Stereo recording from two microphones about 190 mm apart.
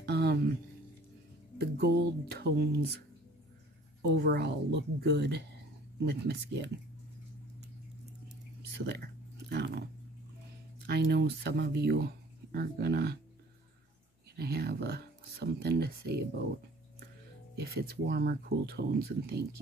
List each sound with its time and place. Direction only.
0.0 s music: 60° right (ahead or behind)
1.6 s speech: 60° right (ahead or behind)
4.0 s speech: 60° right (ahead or behind)
8.6 s a sound: 60° right (ahead or behind)
10.9 s speech: 60° right (ahead or behind)
14.3 s speech: 55° right (ahead or behind)
17.6 s speech: 55° right (ahead or behind)